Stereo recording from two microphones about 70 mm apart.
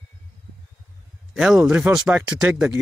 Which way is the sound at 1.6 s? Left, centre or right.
Right.